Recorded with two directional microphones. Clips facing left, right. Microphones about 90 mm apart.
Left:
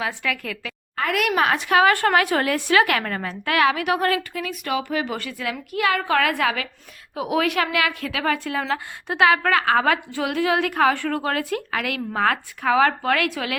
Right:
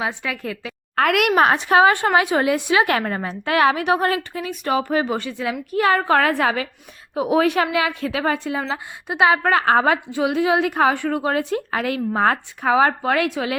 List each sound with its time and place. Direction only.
0.0 s a woman's voice: 20° right (ahead or behind)
0.9 s speech: 65° right (ahead or behind)
1.4 s a woman's voice: 35° right (ahead or behind)
5.1 s a woman's voice: 25° right (ahead or behind)